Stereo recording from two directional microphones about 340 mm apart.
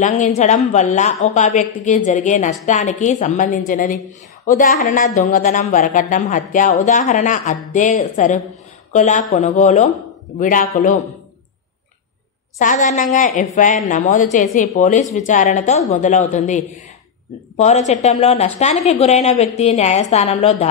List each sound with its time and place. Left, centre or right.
0.0 s speech: left
12.5 s speech: left